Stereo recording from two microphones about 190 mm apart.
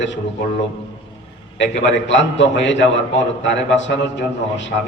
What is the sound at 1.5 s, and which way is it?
A man's voice, 70° left (ahead or behind).